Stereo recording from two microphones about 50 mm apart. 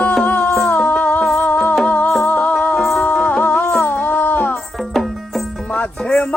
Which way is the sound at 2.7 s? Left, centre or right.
Centre.